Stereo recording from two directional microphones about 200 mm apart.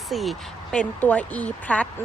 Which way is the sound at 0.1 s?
Centre (ahead or behind).